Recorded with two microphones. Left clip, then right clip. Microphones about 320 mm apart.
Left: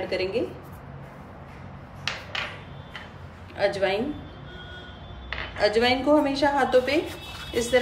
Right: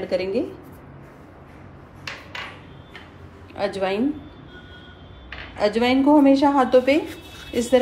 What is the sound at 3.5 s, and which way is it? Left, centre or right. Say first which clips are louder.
Speech: even; centre.